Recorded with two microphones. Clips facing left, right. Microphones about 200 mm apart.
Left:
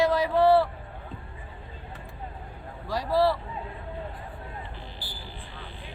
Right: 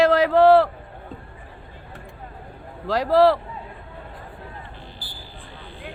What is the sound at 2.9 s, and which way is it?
Speech, 90° right.